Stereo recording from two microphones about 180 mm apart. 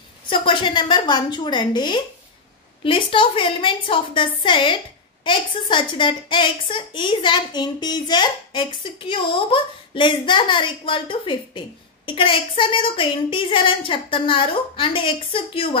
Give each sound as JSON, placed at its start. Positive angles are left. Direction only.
{"t": 0.3, "sound": "a woman's voice", "side_deg": 25}